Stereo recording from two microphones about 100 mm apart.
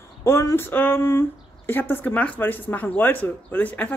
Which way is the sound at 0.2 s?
25° left (ahead or behind).